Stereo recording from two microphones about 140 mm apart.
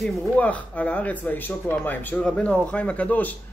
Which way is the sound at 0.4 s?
10° left (ahead or behind).